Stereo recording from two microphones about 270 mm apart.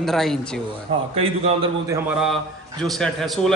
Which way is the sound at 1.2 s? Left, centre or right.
Right.